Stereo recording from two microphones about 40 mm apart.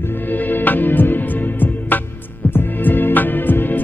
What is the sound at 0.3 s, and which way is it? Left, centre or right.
Music, left.